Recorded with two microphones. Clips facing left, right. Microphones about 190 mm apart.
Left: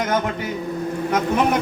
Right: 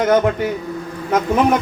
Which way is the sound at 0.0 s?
50° right (ahead or behind).